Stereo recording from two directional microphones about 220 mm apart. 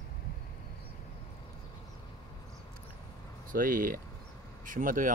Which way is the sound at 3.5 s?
40° right (ahead or behind).